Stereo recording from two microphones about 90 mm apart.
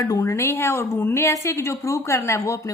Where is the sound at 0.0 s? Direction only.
35° left (ahead or behind).